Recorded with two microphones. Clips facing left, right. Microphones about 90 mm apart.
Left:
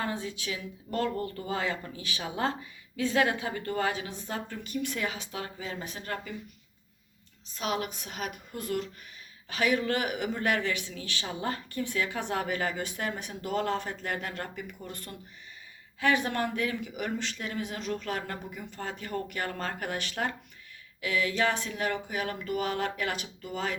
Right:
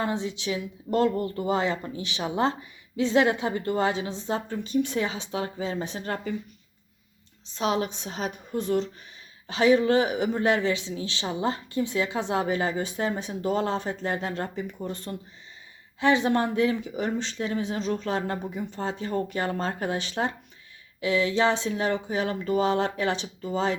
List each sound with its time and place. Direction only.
0.0 s speech: 25° right (ahead or behind)
7.5 s speech: 30° right (ahead or behind)